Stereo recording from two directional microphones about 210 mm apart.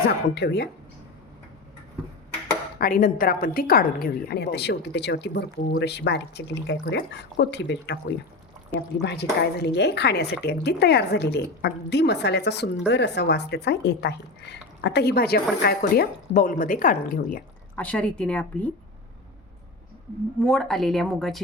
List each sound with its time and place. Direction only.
0.3 s a woman's voice: 50° left (ahead or behind)
2.8 s a woman's voice: 40° left (ahead or behind)
9.0 s a woman's voice: 50° left (ahead or behind)
17.7 s a woman's voice: 5° left (ahead or behind)
20.4 s a woman's voice: 5° left (ahead or behind)